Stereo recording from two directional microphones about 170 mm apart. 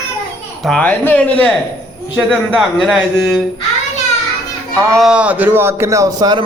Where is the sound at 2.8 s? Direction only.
Centre (ahead or behind).